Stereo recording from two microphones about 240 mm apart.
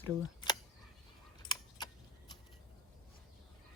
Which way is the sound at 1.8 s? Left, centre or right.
Centre.